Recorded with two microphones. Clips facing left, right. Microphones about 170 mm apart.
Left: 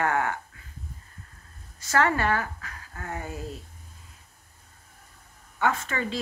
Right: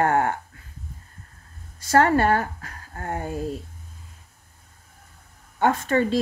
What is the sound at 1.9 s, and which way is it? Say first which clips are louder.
Speech: right 6 dB; 50° right (ahead or behind).